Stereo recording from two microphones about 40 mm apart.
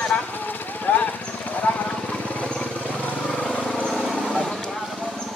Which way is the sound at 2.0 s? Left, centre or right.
Left.